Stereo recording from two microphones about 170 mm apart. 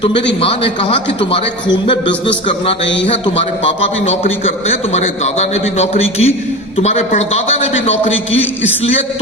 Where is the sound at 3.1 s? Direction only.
30° left (ahead or behind).